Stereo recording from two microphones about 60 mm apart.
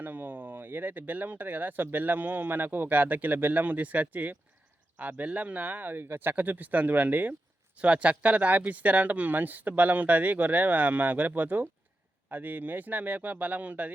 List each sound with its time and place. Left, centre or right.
0.0 s speech: right